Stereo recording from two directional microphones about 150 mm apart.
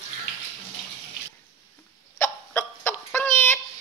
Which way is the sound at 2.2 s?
15° left (ahead or behind).